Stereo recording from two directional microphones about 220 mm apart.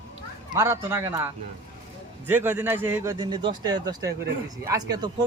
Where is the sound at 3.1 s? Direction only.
20° right (ahead or behind).